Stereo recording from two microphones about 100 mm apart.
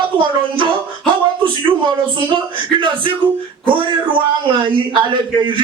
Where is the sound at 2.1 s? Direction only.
55° right (ahead or behind).